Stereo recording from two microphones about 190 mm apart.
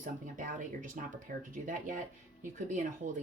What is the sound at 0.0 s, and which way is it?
Speech, 45° right (ahead or behind).